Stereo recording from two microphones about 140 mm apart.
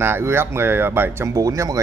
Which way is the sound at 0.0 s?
15° right (ahead or behind).